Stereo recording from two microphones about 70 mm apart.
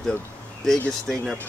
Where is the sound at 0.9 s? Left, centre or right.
Centre.